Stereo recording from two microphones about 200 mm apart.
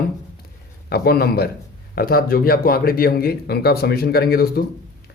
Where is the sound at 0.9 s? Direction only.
50° left (ahead or behind).